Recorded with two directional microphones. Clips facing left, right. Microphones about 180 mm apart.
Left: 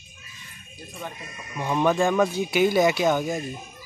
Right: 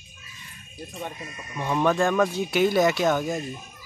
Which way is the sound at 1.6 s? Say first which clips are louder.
Left 1 dB; 5° left (ahead or behind).